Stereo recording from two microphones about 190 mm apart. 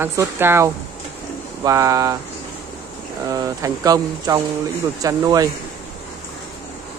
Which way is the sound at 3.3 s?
20° right (ahead or behind).